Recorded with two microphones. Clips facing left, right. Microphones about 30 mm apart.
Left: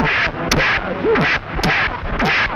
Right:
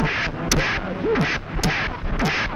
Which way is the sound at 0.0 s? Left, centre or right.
Left.